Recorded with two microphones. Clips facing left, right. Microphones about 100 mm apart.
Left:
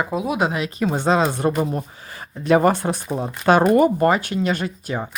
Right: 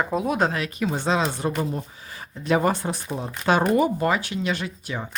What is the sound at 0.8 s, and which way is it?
Speech, 50° left (ahead or behind).